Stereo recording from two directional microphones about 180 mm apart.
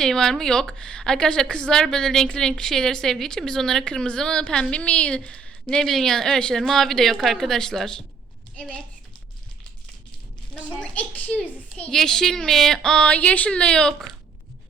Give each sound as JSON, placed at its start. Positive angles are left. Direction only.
{"t": 0.0, "sound": "a woman's voice", "side_deg": 5}
{"t": 10.5, "sound": "a woman's voice", "side_deg": 5}